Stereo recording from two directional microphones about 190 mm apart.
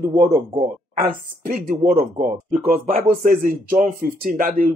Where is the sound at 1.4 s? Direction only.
45° right (ahead or behind).